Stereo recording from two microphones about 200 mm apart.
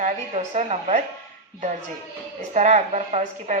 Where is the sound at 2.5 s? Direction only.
35° right (ahead or behind).